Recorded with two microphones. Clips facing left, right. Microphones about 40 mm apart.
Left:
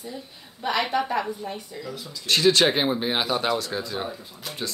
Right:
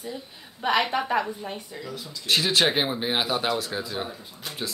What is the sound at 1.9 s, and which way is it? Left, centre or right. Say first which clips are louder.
Speech: even; centre.